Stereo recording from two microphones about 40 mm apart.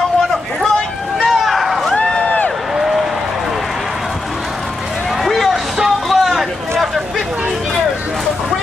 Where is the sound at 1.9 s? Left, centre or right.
Left.